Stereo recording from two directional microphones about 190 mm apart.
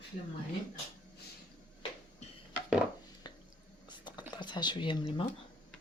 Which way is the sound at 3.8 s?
25° left (ahead or behind).